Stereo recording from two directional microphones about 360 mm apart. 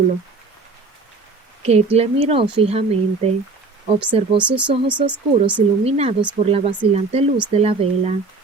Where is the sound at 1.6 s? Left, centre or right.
Centre.